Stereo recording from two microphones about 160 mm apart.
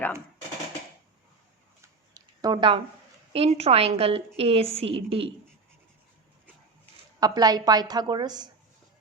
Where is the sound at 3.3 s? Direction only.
40° right (ahead or behind).